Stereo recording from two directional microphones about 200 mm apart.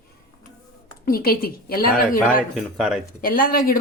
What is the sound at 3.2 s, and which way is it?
Speech, 45° left (ahead or behind).